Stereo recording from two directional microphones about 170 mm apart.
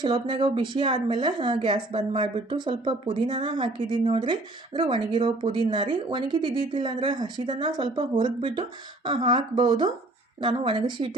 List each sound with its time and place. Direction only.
0.0 s a woman's voice: 30° right (ahead or behind)